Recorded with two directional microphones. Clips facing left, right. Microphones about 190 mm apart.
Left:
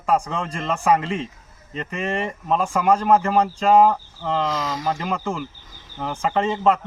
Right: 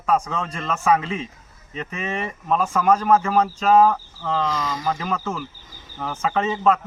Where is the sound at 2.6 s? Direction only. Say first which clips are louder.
Even; 10° left (ahead or behind).